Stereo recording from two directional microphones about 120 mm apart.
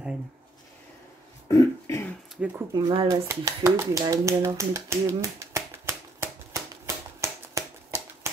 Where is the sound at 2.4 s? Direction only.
10° right (ahead or behind).